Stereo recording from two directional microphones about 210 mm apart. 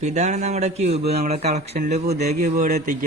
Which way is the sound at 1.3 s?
30° right (ahead or behind).